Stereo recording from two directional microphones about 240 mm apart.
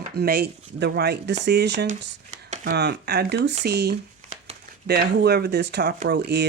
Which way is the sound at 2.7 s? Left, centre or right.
Right.